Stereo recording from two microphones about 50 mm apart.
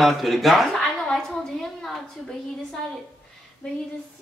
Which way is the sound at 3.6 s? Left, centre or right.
Centre.